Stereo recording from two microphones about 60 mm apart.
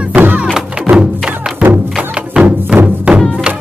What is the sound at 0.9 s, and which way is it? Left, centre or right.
Music, right.